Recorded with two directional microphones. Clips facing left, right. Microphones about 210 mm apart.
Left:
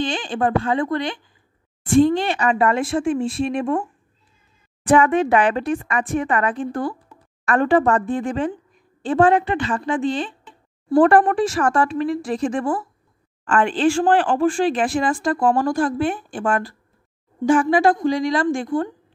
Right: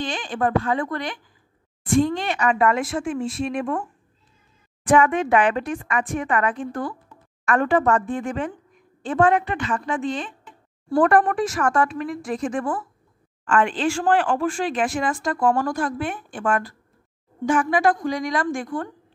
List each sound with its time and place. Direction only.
0.0 s speech: 30° left (ahead or behind)
4.8 s speech: 35° left (ahead or behind)